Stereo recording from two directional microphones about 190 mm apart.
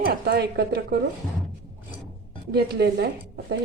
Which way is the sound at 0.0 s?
55° right (ahead or behind).